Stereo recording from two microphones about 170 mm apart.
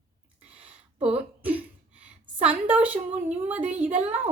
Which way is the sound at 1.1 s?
10° right (ahead or behind).